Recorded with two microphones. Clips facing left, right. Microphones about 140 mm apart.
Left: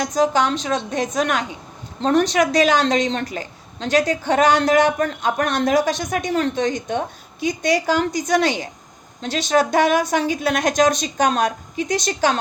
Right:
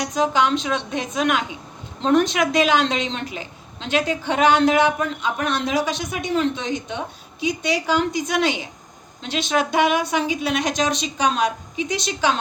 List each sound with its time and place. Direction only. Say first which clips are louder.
0.1 s a woman's voice: even; 40° left (ahead or behind)